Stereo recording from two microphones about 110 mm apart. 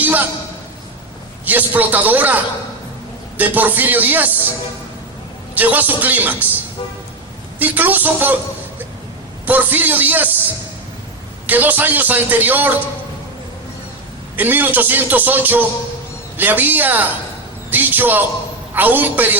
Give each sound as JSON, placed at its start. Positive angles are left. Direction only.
{"t": 0.0, "sound": "a man's voice", "side_deg": -15}
{"t": 1.5, "sound": "a man's voice", "side_deg": -15}
{"t": 5.5, "sound": "a man's voice", "side_deg": -15}
{"t": 7.6, "sound": "a man's voice", "side_deg": -15}
{"t": 9.5, "sound": "a man's voice", "side_deg": -15}
{"t": 11.4, "sound": "a man's voice", "side_deg": -15}
{"t": 14.3, "sound": "a man's voice", "side_deg": -15}